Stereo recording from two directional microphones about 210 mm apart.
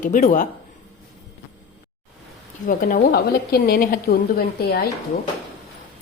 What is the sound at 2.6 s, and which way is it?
A woman's voice, 40° left (ahead or behind).